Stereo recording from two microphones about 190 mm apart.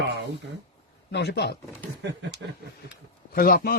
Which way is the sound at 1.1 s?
60° left (ahead or behind).